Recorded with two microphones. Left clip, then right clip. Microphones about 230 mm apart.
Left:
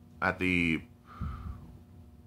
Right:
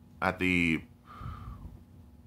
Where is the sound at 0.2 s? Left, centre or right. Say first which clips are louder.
Right 1 dB; centre.